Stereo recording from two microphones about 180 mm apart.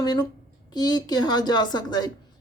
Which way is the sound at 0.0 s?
20° left (ahead or behind).